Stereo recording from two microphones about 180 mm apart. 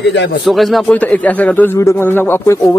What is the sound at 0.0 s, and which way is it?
Speech, 75° left (ahead or behind).